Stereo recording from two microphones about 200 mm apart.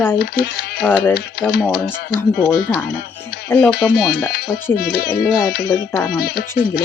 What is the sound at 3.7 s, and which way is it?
Speech, 55° left (ahead or behind).